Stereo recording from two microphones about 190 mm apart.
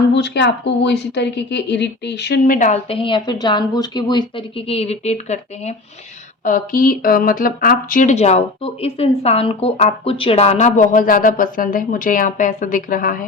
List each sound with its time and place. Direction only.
0.1 s speech: 65° left (ahead or behind); by 3.0 s 40° left (ahead or behind)
3.0 s a woman's voice: 25° left (ahead or behind)
6.4 s speech: 45° left (ahead or behind)